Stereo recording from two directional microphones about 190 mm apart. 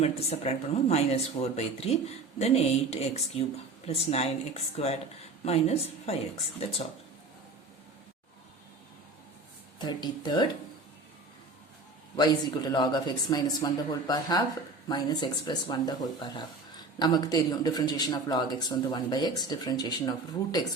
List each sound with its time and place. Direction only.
0.0 s speech: 35° left (ahead or behind)
9.7 s speech: 25° left (ahead or behind)
12.1 s speech: 20° left (ahead or behind)